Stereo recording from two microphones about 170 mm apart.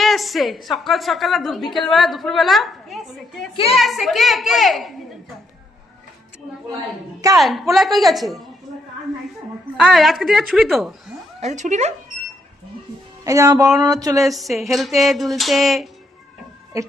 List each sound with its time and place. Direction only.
0.0 s a woman's voice: centre (ahead or behind)
7.3 s a woman's voice: centre (ahead or behind)
9.7 s a woman's voice: centre (ahead or behind)
11.3 s speech: 45° right (ahead or behind)
13.2 s speech: 20° right (ahead or behind)
14.2 s a woman's voice: centre (ahead or behind)
16.7 s speech: 20° right (ahead or behind)